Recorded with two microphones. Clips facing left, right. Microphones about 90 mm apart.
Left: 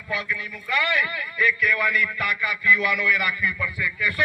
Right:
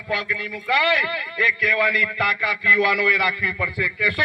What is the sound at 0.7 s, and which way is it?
A man's voice, 75° right (ahead or behind).